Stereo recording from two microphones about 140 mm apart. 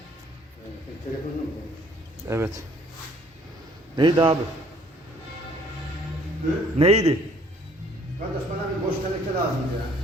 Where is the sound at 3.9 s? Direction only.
35° right (ahead or behind).